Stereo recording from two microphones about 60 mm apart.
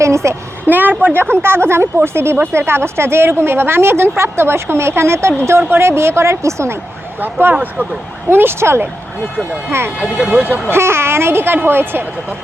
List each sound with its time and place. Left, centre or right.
0.0 s a sound: right
0.7 s a woman's voice: right
7.2 s a woman's voice: right
10.0 s speech: centre
10.4 s speech: right
10.8 s a woman's voice: right